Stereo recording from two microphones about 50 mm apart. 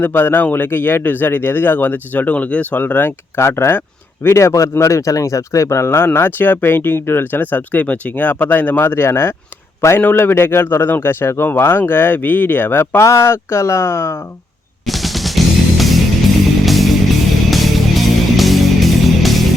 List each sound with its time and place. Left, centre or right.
0.0 s speech: left
2.8 s speech: left
3.4 s speech: left
4.4 s speech: left
6.1 s speech: left
10.0 s speech: left
13.0 s speech: left
14.8 s music: centre